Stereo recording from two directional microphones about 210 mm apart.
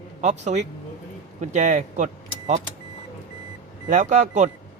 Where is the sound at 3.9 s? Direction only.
35° right (ahead or behind).